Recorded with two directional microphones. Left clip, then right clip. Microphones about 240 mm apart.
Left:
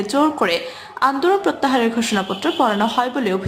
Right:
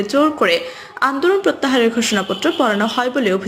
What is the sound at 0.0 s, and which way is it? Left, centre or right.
Speech, centre.